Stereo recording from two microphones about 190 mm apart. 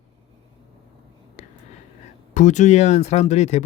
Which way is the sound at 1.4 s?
40° left (ahead or behind).